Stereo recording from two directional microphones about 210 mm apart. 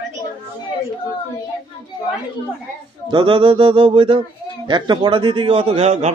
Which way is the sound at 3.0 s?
25° right (ahead or behind).